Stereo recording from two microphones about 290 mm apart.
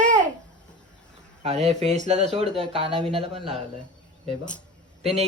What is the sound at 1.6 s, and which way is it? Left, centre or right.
Speech, right.